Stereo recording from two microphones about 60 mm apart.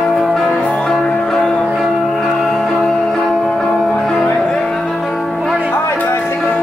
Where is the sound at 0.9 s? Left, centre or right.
Centre.